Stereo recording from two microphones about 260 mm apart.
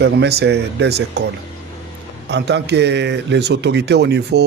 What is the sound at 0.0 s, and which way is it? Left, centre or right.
Speech, right.